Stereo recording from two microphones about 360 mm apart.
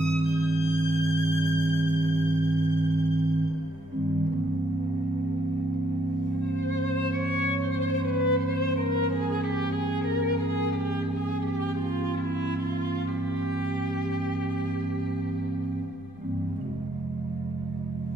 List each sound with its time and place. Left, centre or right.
6.7 s music: left